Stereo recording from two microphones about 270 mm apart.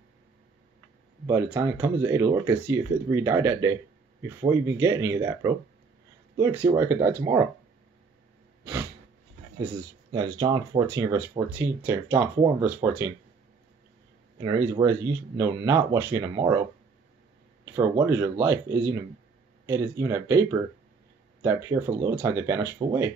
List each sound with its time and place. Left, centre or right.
1.2 s speech: centre
10.1 s speech: centre
14.4 s speech: centre
17.6 s speech: centre